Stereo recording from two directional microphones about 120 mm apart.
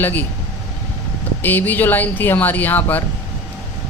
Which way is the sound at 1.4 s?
15° left (ahead or behind).